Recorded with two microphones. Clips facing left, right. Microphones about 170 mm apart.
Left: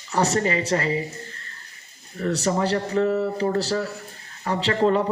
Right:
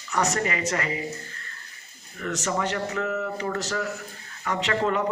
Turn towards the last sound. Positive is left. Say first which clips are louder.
# left 4 dB
turn(degrees=30)  # may be behind; listen again after turning